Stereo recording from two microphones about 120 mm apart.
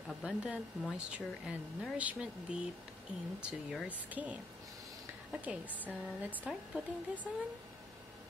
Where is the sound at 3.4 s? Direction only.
10° right (ahead or behind).